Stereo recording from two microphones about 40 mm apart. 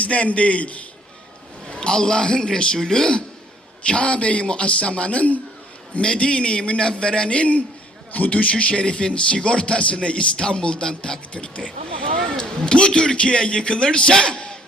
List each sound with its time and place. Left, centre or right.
0.0 s a man's voice: left
1.7 s a man's voice: left
2.7 s a man's voice: centre
3.8 s a man's voice: left
6.0 s a man's voice: left